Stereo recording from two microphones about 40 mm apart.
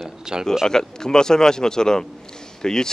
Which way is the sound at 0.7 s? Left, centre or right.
Centre.